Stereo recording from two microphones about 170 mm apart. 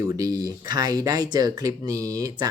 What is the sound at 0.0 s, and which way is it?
Speech, 20° right (ahead or behind).